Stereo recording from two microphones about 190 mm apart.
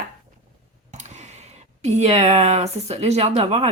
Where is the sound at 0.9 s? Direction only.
35° right (ahead or behind).